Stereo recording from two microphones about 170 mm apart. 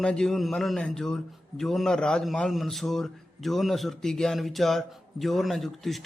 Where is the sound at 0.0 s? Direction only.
5° left (ahead or behind).